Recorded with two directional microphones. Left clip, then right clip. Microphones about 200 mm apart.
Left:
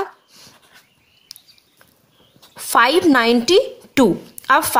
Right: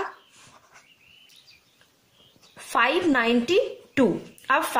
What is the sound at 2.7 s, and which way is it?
A woman's voice, 40° left (ahead or behind).